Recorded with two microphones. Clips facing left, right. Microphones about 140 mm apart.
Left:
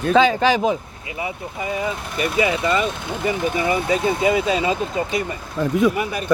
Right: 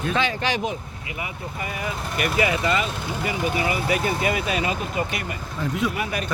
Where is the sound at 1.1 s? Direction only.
25° left (ahead or behind).